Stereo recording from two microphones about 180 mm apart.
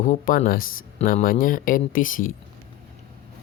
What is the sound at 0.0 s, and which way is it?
Speech, 50° left (ahead or behind).